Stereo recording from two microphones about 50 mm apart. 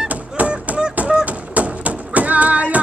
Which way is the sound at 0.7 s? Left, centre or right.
Right.